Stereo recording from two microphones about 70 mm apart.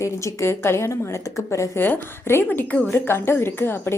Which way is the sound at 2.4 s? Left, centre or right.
Left.